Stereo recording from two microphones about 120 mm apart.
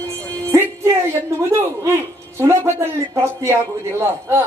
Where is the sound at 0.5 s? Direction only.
20° right (ahead or behind).